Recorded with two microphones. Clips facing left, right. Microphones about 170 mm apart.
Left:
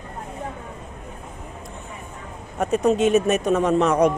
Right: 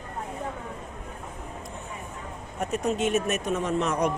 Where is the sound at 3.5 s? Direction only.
90° left.